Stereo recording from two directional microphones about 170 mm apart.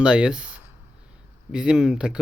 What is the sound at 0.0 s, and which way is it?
Speech, 5° right (ahead or behind).